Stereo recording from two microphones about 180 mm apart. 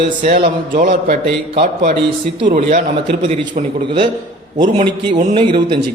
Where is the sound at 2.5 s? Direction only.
45° right (ahead or behind).